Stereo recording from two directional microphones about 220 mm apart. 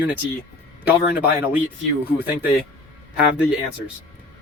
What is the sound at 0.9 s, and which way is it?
Speech, 5° right (ahead or behind).